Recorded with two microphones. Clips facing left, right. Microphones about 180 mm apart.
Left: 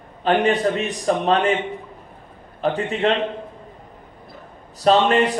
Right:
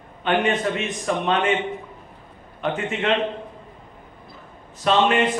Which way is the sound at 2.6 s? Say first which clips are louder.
Left 3 dB; 35° left (ahead or behind).